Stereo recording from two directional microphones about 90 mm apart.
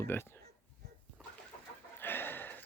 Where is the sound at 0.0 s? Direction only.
25° left (ahead or behind).